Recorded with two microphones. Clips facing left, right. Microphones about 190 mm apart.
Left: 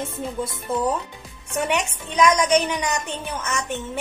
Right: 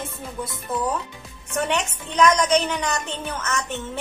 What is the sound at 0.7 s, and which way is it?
Speech, 25° left (ahead or behind).